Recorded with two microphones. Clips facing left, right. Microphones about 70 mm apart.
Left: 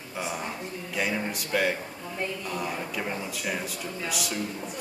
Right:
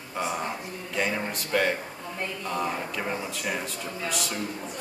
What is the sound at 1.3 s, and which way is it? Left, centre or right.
Speech, centre.